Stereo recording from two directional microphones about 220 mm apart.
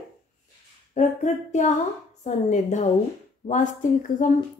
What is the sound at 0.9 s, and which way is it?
A woman's voice, 35° left (ahead or behind).